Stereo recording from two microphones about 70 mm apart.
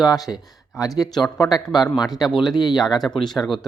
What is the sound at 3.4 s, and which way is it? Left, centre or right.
Speech, left.